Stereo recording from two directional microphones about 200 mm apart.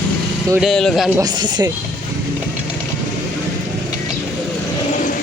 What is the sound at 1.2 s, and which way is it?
Speech, 20° right (ahead or behind).